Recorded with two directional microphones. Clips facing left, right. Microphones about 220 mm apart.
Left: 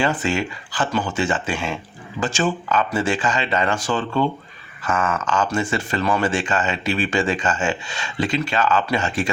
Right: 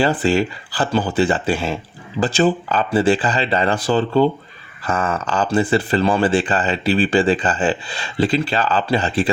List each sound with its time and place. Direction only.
0.0 s speech: 35° right (ahead or behind)